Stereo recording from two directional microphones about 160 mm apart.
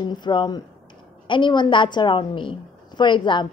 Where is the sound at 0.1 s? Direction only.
30° left (ahead or behind).